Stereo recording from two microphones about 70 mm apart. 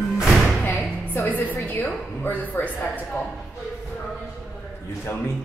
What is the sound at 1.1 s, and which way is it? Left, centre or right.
A woman's voice, left.